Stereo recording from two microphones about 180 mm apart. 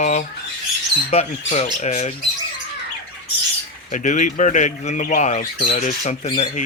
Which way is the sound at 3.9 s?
45° left (ahead or behind).